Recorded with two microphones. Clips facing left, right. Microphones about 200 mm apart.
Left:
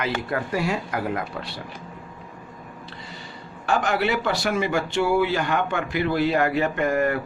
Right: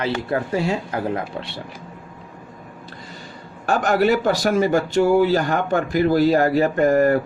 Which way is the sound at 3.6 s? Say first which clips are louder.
Right 5 dB; 45° right (ahead or behind).